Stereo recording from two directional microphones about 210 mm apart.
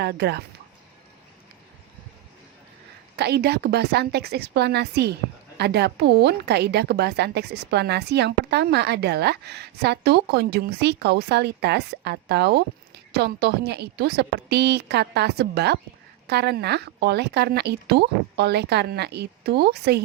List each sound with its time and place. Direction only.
0.0 s a woman's voice: 50° right (ahead or behind)
3.2 s a woman's voice: 50° right (ahead or behind)